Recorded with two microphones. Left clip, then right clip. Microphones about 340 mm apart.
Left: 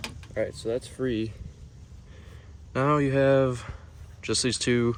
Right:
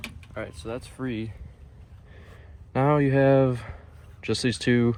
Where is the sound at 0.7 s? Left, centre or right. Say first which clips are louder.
Left 5 dB; right.